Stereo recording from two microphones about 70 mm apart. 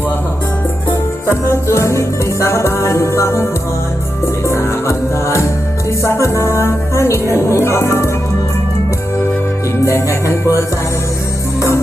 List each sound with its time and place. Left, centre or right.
1.3 s music: left
4.4 s music: left
9.8 s music: left